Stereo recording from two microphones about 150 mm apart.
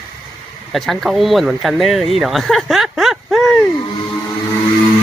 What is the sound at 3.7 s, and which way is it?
Vehicle, 30° left (ahead or behind).